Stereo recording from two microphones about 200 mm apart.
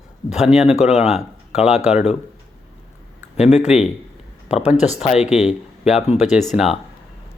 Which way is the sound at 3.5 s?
35° left (ahead or behind).